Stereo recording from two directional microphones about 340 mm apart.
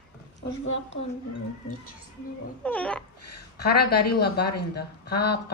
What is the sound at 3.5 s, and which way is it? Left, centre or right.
Speech, left.